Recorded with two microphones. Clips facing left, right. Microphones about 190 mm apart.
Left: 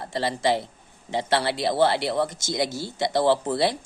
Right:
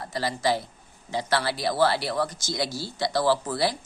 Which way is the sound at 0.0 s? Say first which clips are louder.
Left 2 dB; 25° left (ahead or behind).